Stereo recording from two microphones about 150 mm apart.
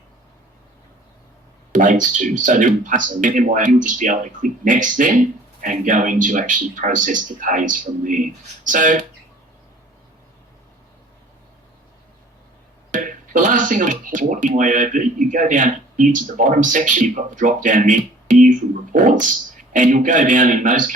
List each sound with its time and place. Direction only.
1.7 s speech: 60° right (ahead or behind)
12.9 s speech: 60° right (ahead or behind)